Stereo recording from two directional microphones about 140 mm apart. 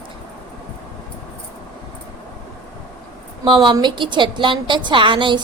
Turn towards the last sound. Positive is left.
turn(degrees=-35)  # may be behind; listen again after turning